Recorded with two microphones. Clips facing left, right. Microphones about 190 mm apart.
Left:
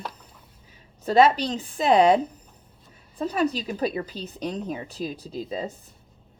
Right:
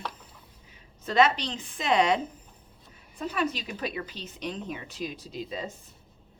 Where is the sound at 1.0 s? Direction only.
35° left (ahead or behind).